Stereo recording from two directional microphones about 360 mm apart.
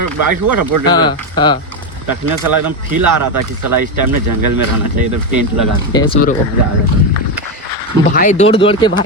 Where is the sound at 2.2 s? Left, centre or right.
Right.